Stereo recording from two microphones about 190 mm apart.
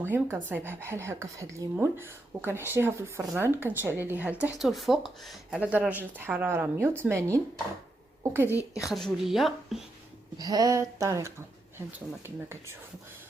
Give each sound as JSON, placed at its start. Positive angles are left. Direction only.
{"t": 0.0, "sound": "speech", "side_deg": -10}
{"t": 10.3, "sound": "speech", "side_deg": -20}